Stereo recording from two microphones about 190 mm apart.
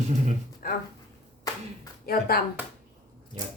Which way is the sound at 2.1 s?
50° left (ahead or behind).